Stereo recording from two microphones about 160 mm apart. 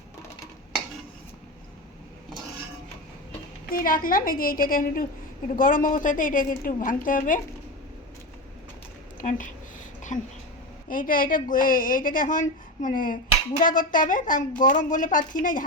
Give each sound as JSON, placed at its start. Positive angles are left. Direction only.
{"t": 3.7, "sound": "a woman's voice", "side_deg": 60}
{"t": 9.2, "sound": "speech", "side_deg": 45}
{"t": 10.8, "sound": "a woman's voice", "side_deg": 60}